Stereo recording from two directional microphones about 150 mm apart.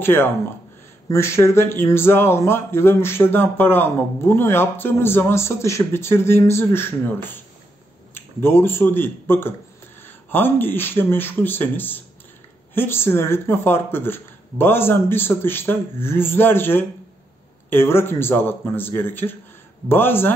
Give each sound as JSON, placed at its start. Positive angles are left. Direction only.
{"t": 0.0, "sound": "a man's voice", "side_deg": 15}